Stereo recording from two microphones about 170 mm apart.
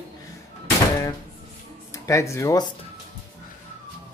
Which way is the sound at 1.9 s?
20° left (ahead or behind).